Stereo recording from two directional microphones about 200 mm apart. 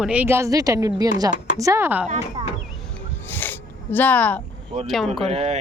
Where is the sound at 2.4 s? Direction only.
25° right (ahead or behind).